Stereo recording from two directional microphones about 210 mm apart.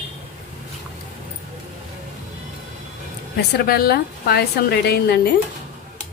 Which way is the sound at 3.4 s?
50° left (ahead or behind).